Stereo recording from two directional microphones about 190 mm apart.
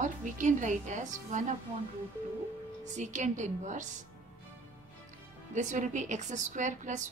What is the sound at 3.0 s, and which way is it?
Speech, 40° right (ahead or behind).